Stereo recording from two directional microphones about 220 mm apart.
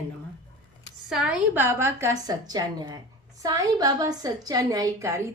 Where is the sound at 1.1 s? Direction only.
5° right (ahead or behind).